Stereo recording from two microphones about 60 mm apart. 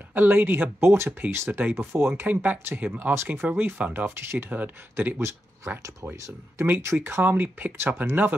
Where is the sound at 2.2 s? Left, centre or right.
Right.